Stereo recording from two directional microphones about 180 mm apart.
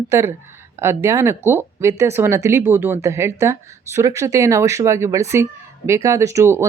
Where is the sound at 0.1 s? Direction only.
15° right (ahead or behind).